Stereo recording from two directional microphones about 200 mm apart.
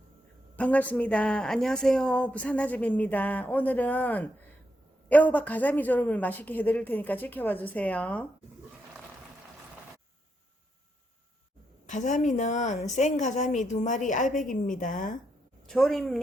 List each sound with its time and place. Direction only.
0.5 s speech: 5° left (ahead or behind)
11.9 s a woman's voice: 40° left (ahead or behind)
15.6 s a woman's voice: centre (ahead or behind)